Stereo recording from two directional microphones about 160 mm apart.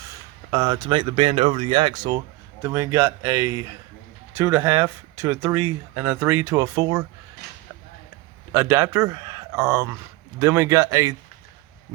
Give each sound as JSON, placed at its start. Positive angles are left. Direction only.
{"t": 0.0, "sound": "speech", "side_deg": -25}
{"t": 2.6, "sound": "speech", "side_deg": -15}
{"t": 8.5, "sound": "speech", "side_deg": -15}